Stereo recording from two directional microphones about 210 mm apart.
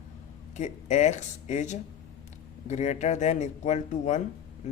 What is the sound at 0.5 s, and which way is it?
Speech, 35° left (ahead or behind).